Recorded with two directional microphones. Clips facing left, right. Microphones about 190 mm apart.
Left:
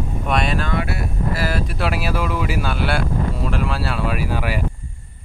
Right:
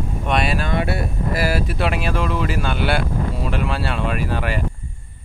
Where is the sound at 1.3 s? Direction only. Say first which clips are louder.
Right 4 dB; 10° right (ahead or behind); by 4.6 s 10° left (ahead or behind).